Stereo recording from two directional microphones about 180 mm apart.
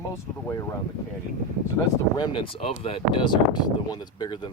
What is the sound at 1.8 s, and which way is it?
Speech, 15° left (ahead or behind).